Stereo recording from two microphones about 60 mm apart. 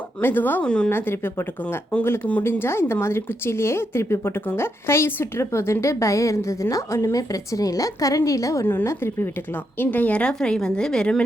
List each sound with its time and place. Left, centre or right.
0.2 s a woman's voice: left
0.6 s a woman's voice: centre
0.9 s a woman's voice: left
8.6 s a woman's voice: left
9.8 s a woman's voice: left; by 11.2 s centre